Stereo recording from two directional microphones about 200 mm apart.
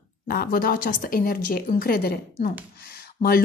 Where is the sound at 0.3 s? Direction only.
50° left (ahead or behind).